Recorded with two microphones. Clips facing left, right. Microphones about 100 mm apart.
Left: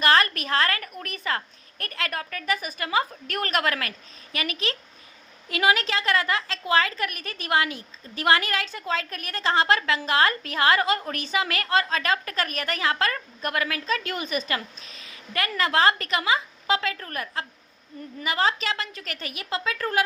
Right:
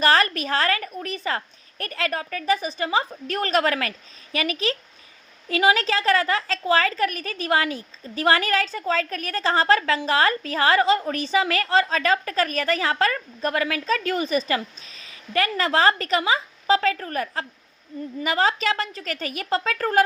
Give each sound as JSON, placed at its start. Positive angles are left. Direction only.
{"t": 0.0, "sound": "a woman's voice", "side_deg": -35}